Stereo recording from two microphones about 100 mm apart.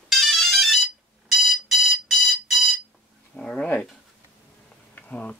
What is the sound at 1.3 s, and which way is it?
Alarm, centre (ahead or behind).